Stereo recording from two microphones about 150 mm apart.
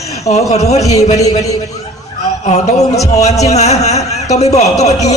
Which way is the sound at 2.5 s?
45° left (ahead or behind).